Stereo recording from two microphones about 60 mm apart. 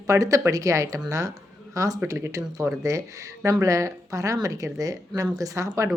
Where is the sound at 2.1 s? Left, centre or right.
Right.